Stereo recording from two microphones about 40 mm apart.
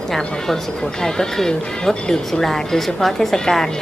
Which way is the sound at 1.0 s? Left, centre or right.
Centre.